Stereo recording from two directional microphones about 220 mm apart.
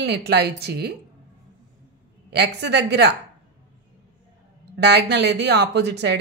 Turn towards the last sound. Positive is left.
turn(degrees=-50)  # may be behind; listen again after turning